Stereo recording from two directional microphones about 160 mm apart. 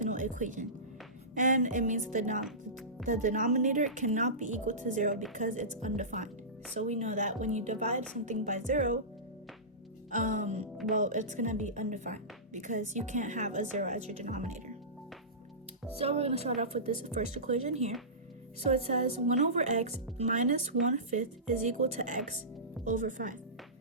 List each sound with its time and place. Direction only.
0.0 s music: 50° right (ahead or behind)
1.4 s a woman's voice: 50° right (ahead or behind)
10.1 s music: 50° right (ahead or behind)
10.9 s a woman's voice: 50° right (ahead or behind)
16.0 s a woman's voice: 40° right (ahead or behind)
18.9 s a woman's voice: 45° right (ahead or behind)